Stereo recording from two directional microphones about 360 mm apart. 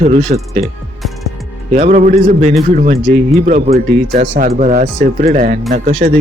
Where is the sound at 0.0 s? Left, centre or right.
Centre.